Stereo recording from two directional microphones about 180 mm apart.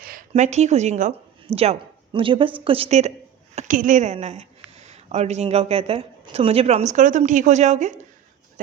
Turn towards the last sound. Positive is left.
turn(degrees=-40)  # may be behind; listen again after turning